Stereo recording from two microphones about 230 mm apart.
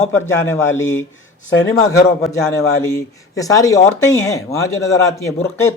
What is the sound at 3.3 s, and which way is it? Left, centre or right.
A man's voice, centre.